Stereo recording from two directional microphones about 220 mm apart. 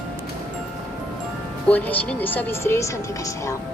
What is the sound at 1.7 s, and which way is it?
Speech, 5° left (ahead or behind).